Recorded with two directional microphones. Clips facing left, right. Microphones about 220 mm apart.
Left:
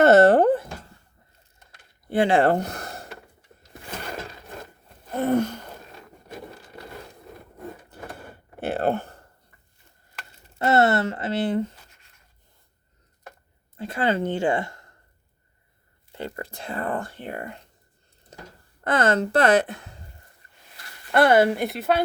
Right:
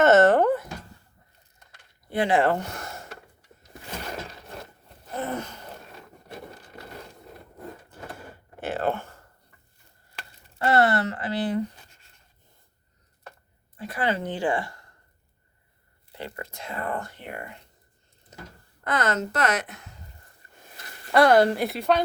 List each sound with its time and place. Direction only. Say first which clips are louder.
0.0 s speech: left 3 dB; 35° left (ahead or behind)
2.0 s speech: left 3 dB; 30° left (ahead or behind)
5.1 s a sound: left 9 dB; 65° left (ahead or behind)
8.7 s a sound: left 3 dB; 35° left (ahead or behind)
10.6 s speech: left 2 dB; 25° left (ahead or behind)
13.7 s speech: left 3 dB; 25° left (ahead or behind)
16.1 s speech: left 4 dB; 35° left (ahead or behind)
18.3 s a sound: left 1 dB; 30° left (ahead or behind)
18.9 s speech: left 5 dB; 30° left (ahead or behind)
21.1 s speech: even; 5° left (ahead or behind)